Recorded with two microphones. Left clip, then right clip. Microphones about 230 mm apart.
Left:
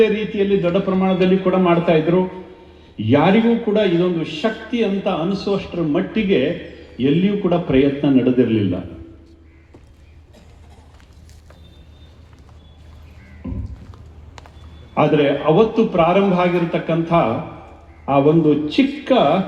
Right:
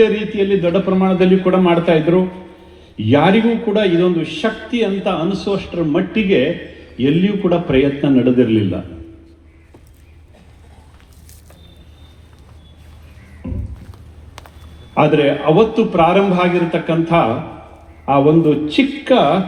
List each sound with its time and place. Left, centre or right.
0.0 s a man's voice: right
13.4 s a sound: right
14.9 s a man's voice: right